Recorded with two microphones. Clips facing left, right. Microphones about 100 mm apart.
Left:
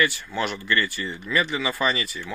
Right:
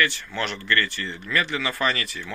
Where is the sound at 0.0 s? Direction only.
10° left (ahead or behind).